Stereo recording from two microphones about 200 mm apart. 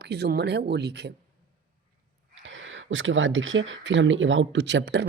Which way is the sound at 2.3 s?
70° right (ahead or behind).